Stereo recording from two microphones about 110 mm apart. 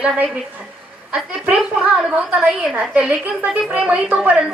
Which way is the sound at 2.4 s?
5° right (ahead or behind).